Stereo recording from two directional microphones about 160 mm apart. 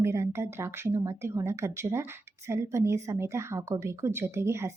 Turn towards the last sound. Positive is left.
turn(degrees=-15)  # may be behind; listen again after turning